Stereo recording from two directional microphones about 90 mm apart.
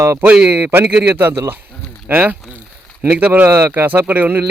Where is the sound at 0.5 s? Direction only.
25° right (ahead or behind).